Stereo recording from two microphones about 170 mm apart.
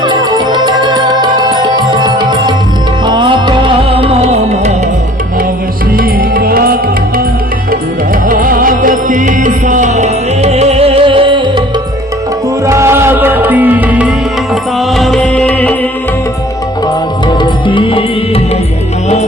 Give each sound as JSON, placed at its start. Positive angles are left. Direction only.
{"t": 0.0, "sound": "music", "side_deg": -25}
{"t": 4.2, "sound": "music", "side_deg": -40}
{"t": 6.0, "sound": "music", "side_deg": -60}
{"t": 8.3, "sound": "music", "side_deg": -55}
{"t": 12.6, "sound": "music", "side_deg": -15}
{"t": 17.4, "sound": "music", "side_deg": 30}